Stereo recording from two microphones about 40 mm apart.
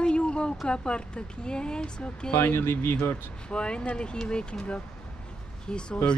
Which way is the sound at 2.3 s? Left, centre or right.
Left.